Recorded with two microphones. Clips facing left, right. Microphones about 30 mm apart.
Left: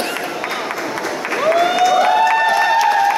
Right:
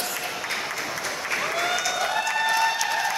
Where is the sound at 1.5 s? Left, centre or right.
Left.